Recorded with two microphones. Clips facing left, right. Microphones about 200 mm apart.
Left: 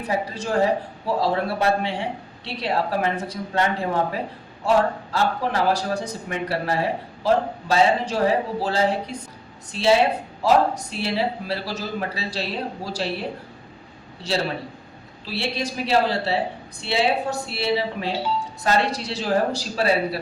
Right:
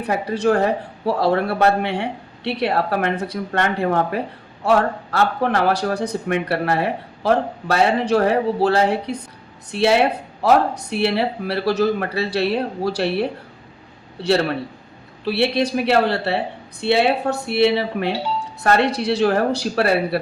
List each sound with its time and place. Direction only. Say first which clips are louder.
0.0 s speech: right 6 dB; 65° right (ahead or behind)